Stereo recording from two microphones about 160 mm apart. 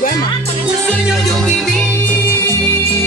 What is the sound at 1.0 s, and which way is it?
Music, centre (ahead or behind).